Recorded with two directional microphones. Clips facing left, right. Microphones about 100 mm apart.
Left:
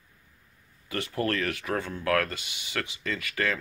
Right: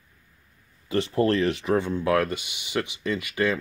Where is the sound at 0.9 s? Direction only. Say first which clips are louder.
Right 7 dB; 25° right (ahead or behind).